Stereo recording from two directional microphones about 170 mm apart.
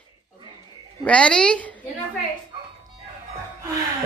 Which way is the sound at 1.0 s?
5° left (ahead or behind).